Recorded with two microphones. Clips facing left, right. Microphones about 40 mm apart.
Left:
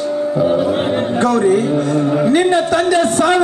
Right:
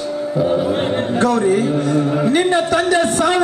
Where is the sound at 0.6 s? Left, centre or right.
Centre.